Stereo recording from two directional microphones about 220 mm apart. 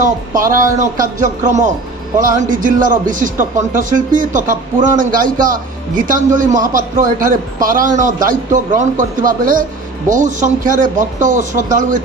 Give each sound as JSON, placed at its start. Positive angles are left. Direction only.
{"t": 0.0, "sound": "a man's voice", "side_deg": -40}